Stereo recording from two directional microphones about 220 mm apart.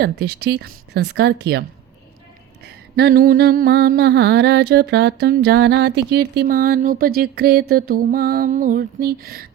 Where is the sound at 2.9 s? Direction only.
45° right (ahead or behind).